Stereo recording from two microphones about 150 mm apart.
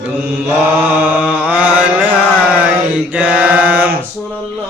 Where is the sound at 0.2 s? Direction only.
10° right (ahead or behind).